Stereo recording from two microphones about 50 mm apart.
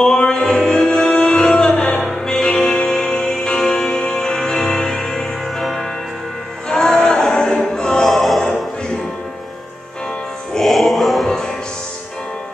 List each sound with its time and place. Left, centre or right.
0.0 s music: centre
2.0 s music: centre
6.7 s music: centre
10.6 s music: centre
11.2 s music: centre